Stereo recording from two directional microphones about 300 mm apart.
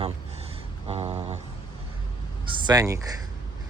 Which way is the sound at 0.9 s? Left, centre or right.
Right.